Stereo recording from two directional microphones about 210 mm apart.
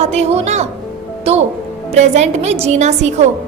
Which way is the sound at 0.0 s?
30° right (ahead or behind).